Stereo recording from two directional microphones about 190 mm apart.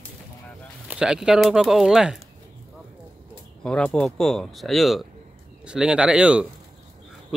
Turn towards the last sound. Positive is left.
turn(degrees=-5)  # may be behind; listen again after turning